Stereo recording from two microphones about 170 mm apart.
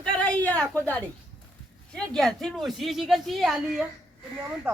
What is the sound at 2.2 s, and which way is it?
A woman's voice, centre (ahead or behind).